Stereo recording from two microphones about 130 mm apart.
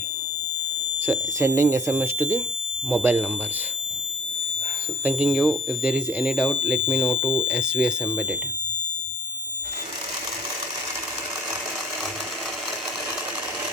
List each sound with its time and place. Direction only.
1.0 s speech: 20° right (ahead or behind)
5.0 s speech: 10° right (ahead or behind)